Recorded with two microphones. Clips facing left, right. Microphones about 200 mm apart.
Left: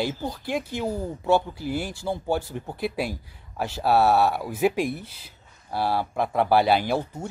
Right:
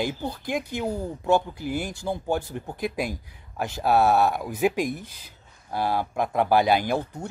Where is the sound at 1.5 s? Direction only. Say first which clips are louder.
Even; 50° right (ahead or behind).